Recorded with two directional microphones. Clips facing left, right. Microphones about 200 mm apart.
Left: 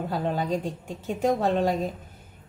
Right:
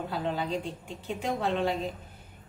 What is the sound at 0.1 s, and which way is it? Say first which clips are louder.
A woman's voice: left 4 dB; 45° left (ahead or behind).